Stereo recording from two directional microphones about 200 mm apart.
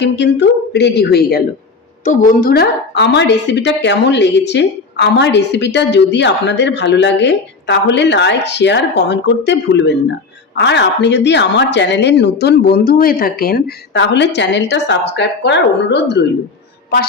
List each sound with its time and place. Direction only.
0.0 s a woman's voice: 60° left (ahead or behind)